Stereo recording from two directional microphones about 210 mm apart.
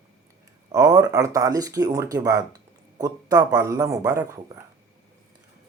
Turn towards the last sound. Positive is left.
turn(degrees=-15)  # may be behind; listen again after turning